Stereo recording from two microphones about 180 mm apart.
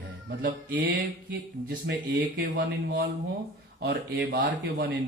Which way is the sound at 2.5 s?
70° right (ahead or behind).